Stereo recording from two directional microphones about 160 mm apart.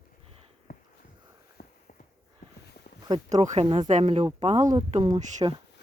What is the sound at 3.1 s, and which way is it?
Speech, 40° right (ahead or behind).